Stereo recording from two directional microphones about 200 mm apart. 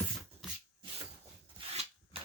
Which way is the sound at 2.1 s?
25° right (ahead or behind).